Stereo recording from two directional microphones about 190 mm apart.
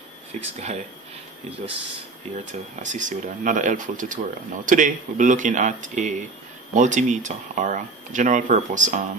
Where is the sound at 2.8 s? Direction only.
40° right (ahead or behind).